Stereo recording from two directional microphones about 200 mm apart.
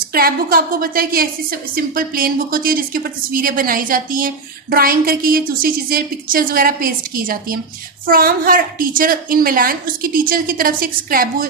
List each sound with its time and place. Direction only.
0.1 s a woman's voice: 50° right (ahead or behind)